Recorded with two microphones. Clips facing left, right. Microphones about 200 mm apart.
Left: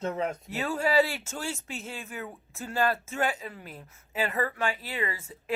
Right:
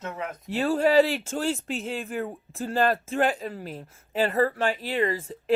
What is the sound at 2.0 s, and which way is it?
Speech, 40° right (ahead or behind).